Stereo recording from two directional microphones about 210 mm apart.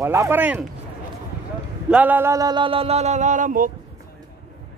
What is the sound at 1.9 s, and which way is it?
Speech, 10° right (ahead or behind).